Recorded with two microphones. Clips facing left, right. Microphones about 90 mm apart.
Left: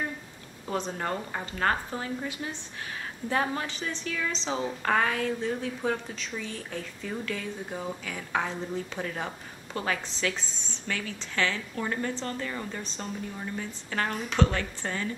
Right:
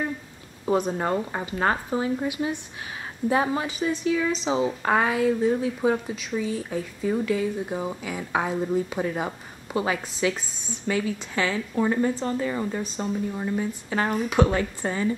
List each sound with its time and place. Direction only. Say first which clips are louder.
0.7 s a woman's voice: right 7 dB; 15° right (ahead or behind)